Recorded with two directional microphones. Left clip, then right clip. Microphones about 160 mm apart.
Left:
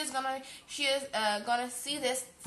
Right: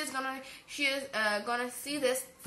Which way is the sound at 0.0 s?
20° left (ahead or behind).